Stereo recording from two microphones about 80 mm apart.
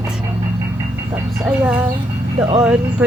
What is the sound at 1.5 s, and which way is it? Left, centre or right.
Speech, centre.